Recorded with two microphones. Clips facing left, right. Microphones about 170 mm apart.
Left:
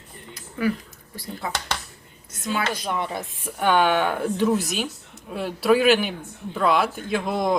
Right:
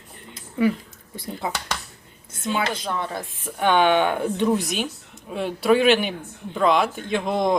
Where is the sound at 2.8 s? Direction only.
15° left (ahead or behind).